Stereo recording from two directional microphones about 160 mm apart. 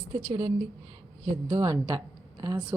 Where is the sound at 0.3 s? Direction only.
30° right (ahead or behind).